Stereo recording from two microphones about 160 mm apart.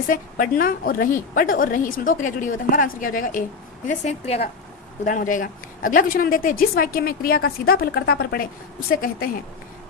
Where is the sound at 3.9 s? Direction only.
45° left (ahead or behind).